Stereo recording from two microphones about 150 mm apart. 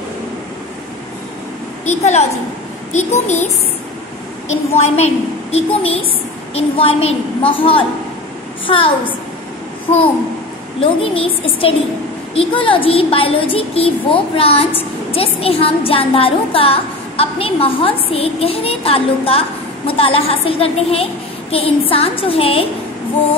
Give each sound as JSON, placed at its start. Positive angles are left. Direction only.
{"t": 1.9, "sound": "a woman's voice", "side_deg": 50}
{"t": 4.7, "sound": "a woman's voice", "side_deg": 45}
{"t": 10.8, "sound": "a woman's voice", "side_deg": 40}